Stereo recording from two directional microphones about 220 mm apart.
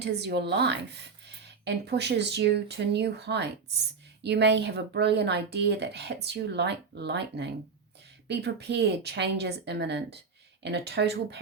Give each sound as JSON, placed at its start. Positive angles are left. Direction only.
{"t": 0.0, "sound": "speech", "side_deg": -50}